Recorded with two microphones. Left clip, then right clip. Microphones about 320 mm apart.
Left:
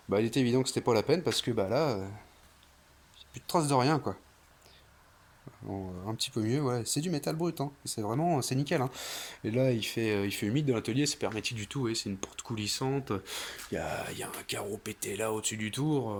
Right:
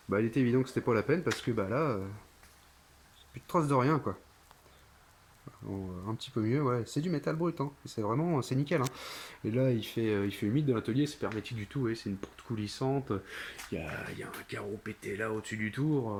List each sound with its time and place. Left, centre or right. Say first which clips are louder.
0.1 s speech: left 1 dB; centre
3.3 s speech: left 1 dB; centre
6.1 s speech: left 1 dB; centre
13.7 s speech: left 5 dB; left
14.0 s speech: left 3 dB; centre